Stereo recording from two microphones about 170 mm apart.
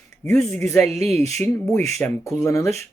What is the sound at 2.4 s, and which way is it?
Speech, 15° left (ahead or behind).